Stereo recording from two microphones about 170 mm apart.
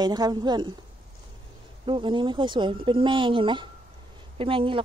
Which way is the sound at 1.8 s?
30° right (ahead or behind).